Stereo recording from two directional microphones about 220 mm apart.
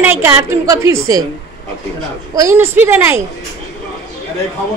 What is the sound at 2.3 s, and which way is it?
Speech, 15° right (ahead or behind).